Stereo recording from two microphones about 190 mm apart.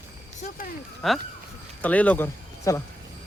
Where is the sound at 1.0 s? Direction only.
Centre (ahead or behind).